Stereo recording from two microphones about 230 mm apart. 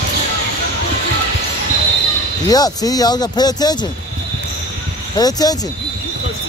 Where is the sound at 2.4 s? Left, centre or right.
Centre.